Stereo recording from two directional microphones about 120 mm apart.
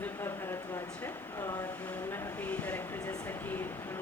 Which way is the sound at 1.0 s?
20° left (ahead or behind).